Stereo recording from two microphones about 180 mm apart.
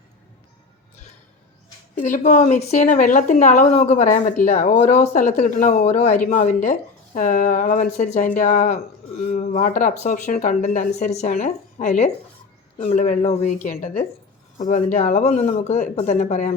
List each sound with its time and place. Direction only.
2.0 s a woman's voice: 45° left (ahead or behind)